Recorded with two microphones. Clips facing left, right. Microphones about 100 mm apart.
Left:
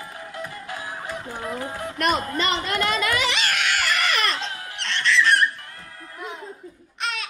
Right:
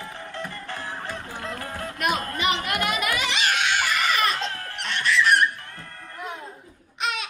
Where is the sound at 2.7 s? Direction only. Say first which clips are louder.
Left 2 dB; 10° right (ahead or behind).